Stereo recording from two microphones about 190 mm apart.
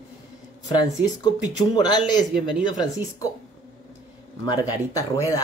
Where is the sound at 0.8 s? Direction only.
20° left (ahead or behind).